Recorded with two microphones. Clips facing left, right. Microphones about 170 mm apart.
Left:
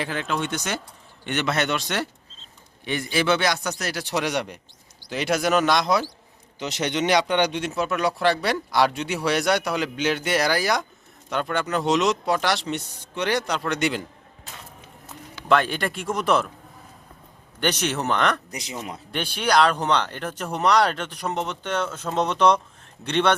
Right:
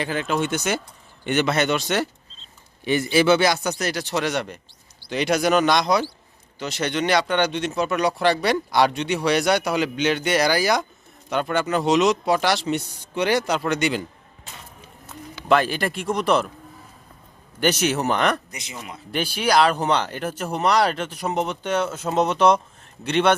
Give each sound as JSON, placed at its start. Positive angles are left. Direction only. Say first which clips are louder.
{"t": 0.0, "sound": "speech", "louder": "right 3 dB", "side_deg": -5}
{"t": 4.0, "sound": "speech", "louder": "left 2 dB", "side_deg": 10}
{"t": 6.6, "sound": "speech", "louder": "even", "side_deg": 20}
{"t": 15.4, "sound": "speech", "louder": "right 2 dB", "side_deg": -5}
{"t": 17.6, "sound": "speech", "louder": "right 4 dB", "side_deg": -5}
{"t": 18.5, "sound": "speech", "louder": "left 4 dB", "side_deg": 35}
{"t": 19.1, "sound": "speech", "louder": "right 2 dB", "side_deg": -5}